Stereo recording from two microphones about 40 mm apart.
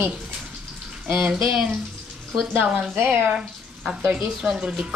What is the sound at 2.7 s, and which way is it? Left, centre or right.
Speech, right.